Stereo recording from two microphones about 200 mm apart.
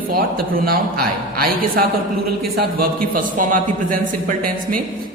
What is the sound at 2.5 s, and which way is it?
A man's voice, 45° right (ahead or behind).